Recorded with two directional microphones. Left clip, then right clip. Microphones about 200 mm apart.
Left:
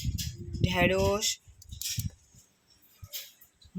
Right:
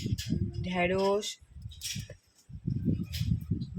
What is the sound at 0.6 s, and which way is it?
Speech, 35° left (ahead or behind).